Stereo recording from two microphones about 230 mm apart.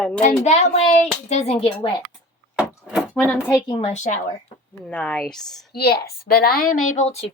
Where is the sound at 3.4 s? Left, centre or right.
Centre.